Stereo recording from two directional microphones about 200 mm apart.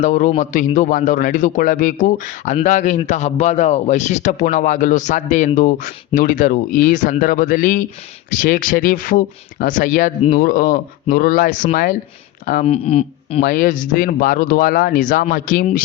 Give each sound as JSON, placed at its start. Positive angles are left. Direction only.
{"t": 0.0, "sound": "a man's voice", "side_deg": 35}
{"t": 13.4, "sound": "speech", "side_deg": 40}